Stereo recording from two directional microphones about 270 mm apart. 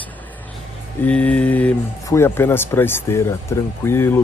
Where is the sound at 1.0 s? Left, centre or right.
Centre.